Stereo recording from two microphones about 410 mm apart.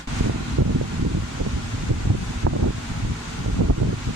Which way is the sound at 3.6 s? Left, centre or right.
Right.